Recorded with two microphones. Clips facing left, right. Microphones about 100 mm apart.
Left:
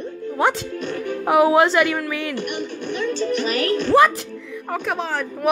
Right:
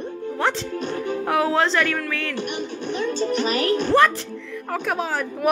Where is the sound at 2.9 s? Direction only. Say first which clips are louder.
Left 1 dB; 35° right (ahead or behind).